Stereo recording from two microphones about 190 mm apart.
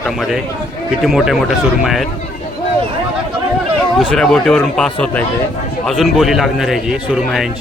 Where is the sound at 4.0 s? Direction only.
5° left (ahead or behind).